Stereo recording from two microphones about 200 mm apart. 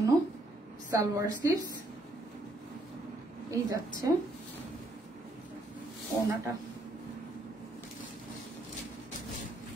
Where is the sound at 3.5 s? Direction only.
15° right (ahead or behind).